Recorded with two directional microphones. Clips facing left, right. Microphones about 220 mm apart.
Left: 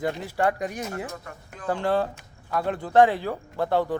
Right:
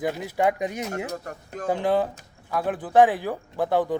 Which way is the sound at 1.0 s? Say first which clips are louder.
Right 5 dB; 45° right (ahead or behind).